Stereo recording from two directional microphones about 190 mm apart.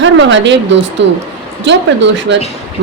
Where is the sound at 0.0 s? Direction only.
75° right (ahead or behind).